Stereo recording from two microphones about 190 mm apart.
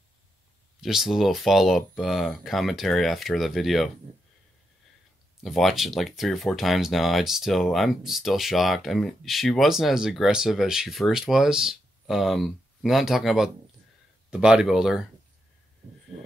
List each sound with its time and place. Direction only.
0.7 s speech: centre (ahead or behind)
5.4 s speech: centre (ahead or behind)